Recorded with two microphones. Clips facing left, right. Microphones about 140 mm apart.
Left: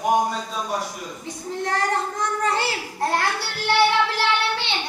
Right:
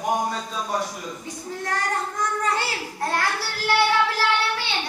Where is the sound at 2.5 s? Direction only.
25° left (ahead or behind).